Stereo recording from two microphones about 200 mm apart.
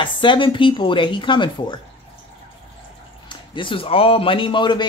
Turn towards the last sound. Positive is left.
turn(degrees=25)  # may be behind; listen again after turning